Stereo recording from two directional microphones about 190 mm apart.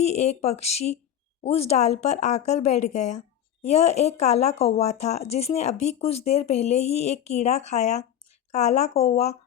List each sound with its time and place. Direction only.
0.0 s speech: 35° left (ahead or behind)